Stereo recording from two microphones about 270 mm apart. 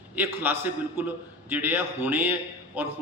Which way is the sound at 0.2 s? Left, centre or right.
Centre.